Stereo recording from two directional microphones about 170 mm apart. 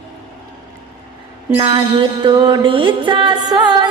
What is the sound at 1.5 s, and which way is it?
Music, 25° right (ahead or behind).